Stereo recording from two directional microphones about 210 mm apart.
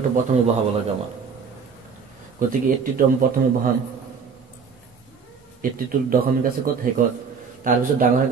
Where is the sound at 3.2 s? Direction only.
45° right (ahead or behind).